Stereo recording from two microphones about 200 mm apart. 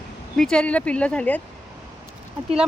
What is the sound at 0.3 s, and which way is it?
Speech, 5° left (ahead or behind).